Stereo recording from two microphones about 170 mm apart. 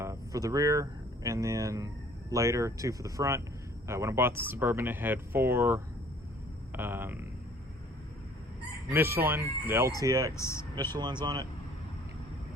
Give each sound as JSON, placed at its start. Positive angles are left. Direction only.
{"t": 0.0, "sound": "speech", "side_deg": -20}
{"t": 8.9, "sound": "speech", "side_deg": -15}
{"t": 10.3, "sound": "speech", "side_deg": 15}
{"t": 10.9, "sound": "speech", "side_deg": -25}